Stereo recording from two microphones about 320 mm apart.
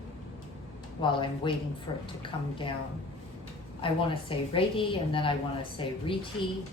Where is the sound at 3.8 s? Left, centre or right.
Centre.